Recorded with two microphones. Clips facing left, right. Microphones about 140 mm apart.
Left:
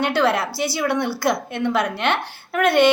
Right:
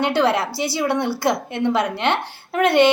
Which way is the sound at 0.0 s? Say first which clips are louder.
Right 1 dB; 20° right (ahead or behind).